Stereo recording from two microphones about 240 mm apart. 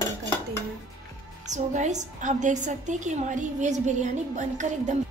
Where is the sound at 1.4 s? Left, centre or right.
Right.